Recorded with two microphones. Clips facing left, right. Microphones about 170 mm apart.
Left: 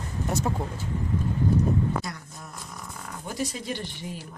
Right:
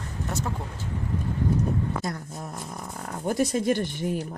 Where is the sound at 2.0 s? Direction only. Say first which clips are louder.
Right 6 dB; 45° right (ahead or behind).